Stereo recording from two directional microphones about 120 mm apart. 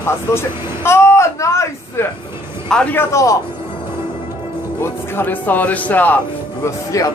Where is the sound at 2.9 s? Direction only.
25° left (ahead or behind).